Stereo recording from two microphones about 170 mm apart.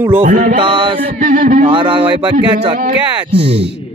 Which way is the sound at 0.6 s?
30° right (ahead or behind).